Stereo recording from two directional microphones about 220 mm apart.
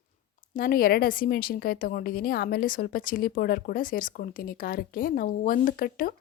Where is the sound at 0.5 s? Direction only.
40° left (ahead or behind).